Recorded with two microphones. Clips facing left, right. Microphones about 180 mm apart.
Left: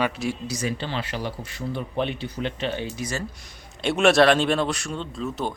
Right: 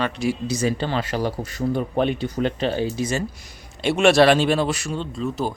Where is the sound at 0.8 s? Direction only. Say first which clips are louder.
Right 6 dB; 45° right (ahead or behind).